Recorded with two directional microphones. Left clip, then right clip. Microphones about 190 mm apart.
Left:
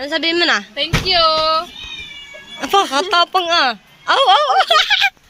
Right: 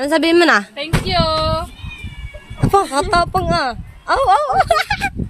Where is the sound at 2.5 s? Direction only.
10° right (ahead or behind).